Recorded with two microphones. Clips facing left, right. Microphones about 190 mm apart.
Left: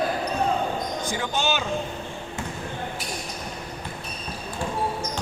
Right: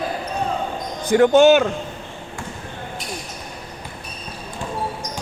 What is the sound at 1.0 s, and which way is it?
Speech, 60° right (ahead or behind).